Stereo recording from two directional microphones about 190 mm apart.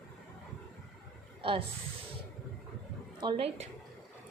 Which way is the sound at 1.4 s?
25° right (ahead or behind).